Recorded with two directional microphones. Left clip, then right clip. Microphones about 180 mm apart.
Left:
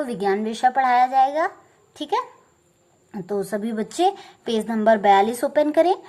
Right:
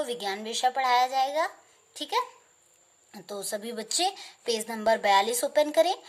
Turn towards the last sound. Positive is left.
turn(degrees=-35)  # may be behind; listen again after turning